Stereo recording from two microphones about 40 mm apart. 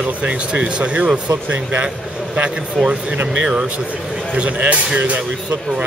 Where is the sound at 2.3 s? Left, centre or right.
Right.